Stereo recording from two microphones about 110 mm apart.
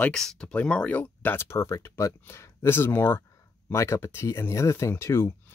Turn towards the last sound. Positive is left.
turn(degrees=25)  # may be behind; listen again after turning